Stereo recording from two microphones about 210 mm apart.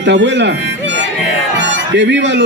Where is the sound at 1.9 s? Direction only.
55° right (ahead or behind).